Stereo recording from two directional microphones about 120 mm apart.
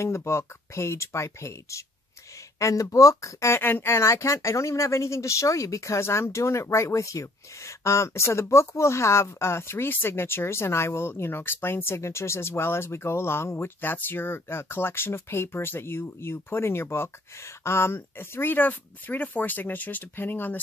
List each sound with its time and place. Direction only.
0.0 s speech: 20° left (ahead or behind)